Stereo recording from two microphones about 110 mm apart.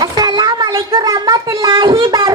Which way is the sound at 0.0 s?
40° right (ahead or behind).